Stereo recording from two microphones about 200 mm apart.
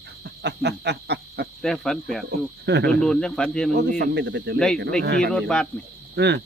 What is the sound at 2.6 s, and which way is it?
Speech, 60° right (ahead or behind).